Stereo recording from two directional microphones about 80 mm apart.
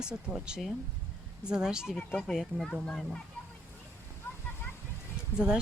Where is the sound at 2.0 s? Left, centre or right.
Left.